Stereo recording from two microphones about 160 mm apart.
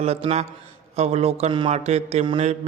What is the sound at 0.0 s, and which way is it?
A man's voice, 40° right (ahead or behind).